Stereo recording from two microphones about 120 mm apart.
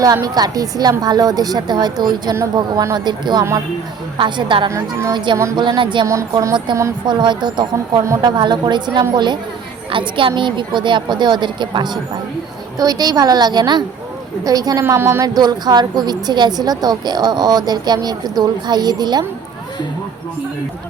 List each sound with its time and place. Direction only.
0.0 s a woman's voice: 30° right (ahead or behind)
4.7 s a woman's voice: 25° right (ahead or behind)
5.1 s a woman's voice: 40° right (ahead or behind)
8.0 s a woman's voice: 25° right (ahead or behind)
8.4 s a woman's voice: 40° right (ahead or behind); by 15.3 s 20° right (ahead or behind)
15.4 s a woman's voice: 35° right (ahead or behind)